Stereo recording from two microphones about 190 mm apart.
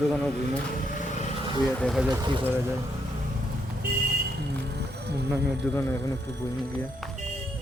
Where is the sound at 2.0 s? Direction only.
20° right (ahead or behind).